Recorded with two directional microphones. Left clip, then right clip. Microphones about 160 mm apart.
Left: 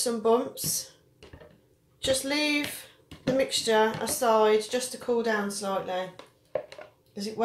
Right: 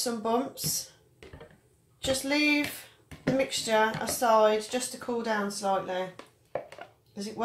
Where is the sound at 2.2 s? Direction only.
20° left (ahead or behind).